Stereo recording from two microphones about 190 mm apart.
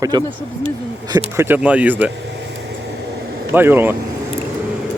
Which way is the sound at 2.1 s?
65° right (ahead or behind).